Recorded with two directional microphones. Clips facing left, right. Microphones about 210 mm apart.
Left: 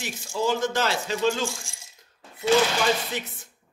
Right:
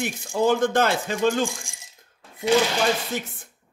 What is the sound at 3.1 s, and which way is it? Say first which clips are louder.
Chopping: right 3 dB; 50° right (ahead or behind).